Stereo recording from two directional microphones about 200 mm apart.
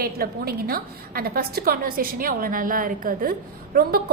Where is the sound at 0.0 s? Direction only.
50° right (ahead or behind).